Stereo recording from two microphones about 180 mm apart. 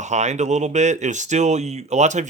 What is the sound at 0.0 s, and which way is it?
Speech, 40° right (ahead or behind).